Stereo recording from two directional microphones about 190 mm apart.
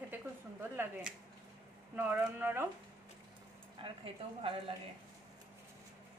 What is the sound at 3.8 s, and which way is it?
Speech, 25° right (ahead or behind).